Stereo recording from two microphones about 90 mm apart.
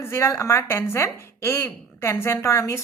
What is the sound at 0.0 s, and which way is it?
A woman's voice, 30° left (ahead or behind).